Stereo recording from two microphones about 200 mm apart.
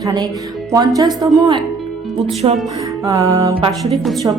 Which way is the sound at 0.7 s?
20° right (ahead or behind).